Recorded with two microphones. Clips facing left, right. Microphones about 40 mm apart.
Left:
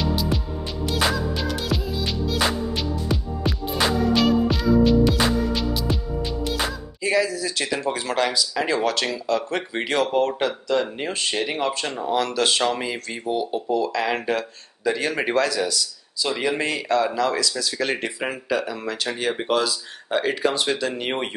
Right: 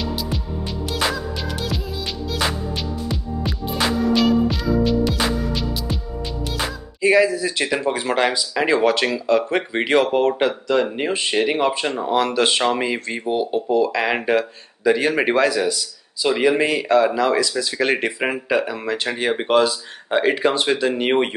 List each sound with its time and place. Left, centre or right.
1.1 s music: centre
7.0 s speech: right